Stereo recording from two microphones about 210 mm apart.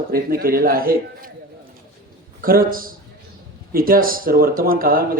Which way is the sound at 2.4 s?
45° right (ahead or behind).